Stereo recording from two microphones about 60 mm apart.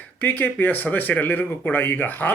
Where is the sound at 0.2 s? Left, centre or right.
Left.